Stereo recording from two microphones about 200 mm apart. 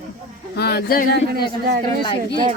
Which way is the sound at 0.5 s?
55° left (ahead or behind).